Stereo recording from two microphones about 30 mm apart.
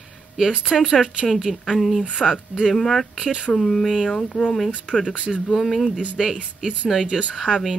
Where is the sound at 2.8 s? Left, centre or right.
Centre.